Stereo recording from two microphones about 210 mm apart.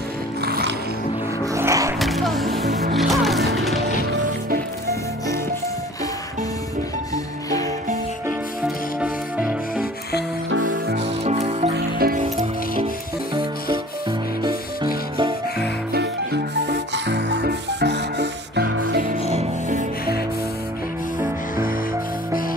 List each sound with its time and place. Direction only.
0.5 s music: 50° right (ahead or behind)
1.4 s music: 15° right (ahead or behind)
2.0 s music: centre (ahead or behind)
8.6 s music: 5° right (ahead or behind)
10.5 s music: 65° right (ahead or behind)
11.2 s music: 30° right (ahead or behind)
11.7 s music: 45° right (ahead or behind)
16.6 s music: 55° right (ahead or behind)
19.0 s music: 35° right (ahead or behind)